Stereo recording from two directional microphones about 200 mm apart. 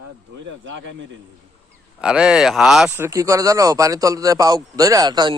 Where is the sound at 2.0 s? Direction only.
5° right (ahead or behind).